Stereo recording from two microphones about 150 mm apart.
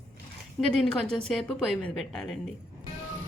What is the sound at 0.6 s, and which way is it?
A woman's voice, 5° left (ahead or behind).